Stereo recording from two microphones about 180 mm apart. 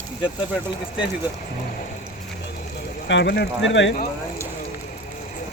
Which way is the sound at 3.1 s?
80° left.